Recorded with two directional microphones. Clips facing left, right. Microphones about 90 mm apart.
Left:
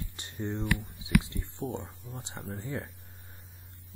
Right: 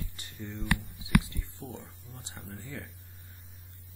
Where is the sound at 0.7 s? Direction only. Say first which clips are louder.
Even; 20° left (ahead or behind).